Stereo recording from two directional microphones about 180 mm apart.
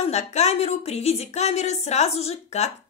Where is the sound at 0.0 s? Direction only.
35° left (ahead or behind).